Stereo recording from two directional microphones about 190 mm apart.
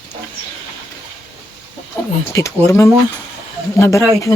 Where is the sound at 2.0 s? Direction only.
15° left (ahead or behind).